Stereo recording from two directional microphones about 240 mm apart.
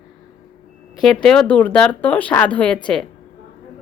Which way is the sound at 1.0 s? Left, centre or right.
Centre.